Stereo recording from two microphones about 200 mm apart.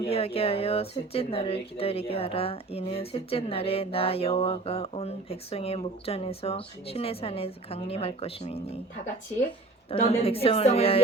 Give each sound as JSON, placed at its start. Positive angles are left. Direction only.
{"t": 0.1, "sound": "speech", "side_deg": 30}
{"t": 9.9, "sound": "speech", "side_deg": 30}